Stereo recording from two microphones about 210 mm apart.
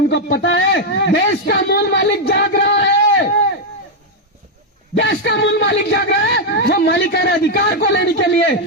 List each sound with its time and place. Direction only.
0.1 s a man's voice: 55° left (ahead or behind)
4.9 s speech: 55° left (ahead or behind)